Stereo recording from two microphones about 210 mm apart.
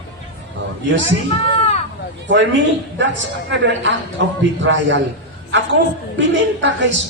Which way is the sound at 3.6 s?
60° right (ahead or behind).